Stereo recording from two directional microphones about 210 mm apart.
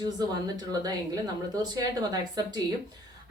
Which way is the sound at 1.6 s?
20° right (ahead or behind).